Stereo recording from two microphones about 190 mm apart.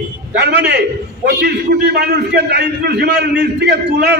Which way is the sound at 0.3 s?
60° right (ahead or behind).